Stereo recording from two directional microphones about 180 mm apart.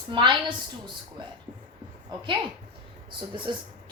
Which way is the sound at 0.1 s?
25° right (ahead or behind).